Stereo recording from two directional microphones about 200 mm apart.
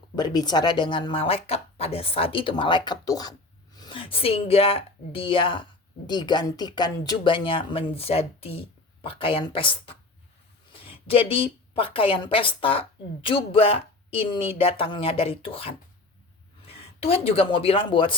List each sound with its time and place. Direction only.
0.2 s a woman's voice: 20° left (ahead or behind)